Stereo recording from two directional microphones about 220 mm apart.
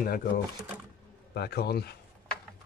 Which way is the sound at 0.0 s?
40° left (ahead or behind).